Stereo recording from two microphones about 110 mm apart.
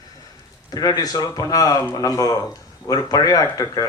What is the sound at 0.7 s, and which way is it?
A man's voice, 35° left (ahead or behind).